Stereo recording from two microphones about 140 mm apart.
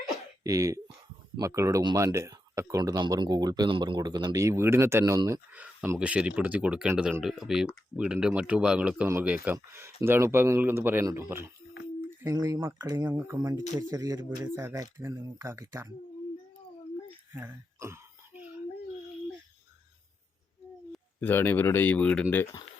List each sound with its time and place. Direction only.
0.4 s speech: 25° right (ahead or behind)
17.3 s throat clearing: 15° right (ahead or behind)
21.2 s speech: 15° left (ahead or behind)